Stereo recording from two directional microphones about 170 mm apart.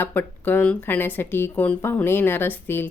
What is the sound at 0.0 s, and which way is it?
Speech, 10° left (ahead or behind).